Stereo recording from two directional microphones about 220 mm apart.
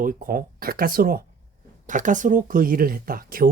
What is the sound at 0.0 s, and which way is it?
Speech, 40° right (ahead or behind).